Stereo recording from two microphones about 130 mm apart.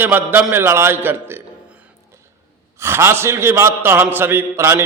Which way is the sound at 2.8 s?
20° right (ahead or behind).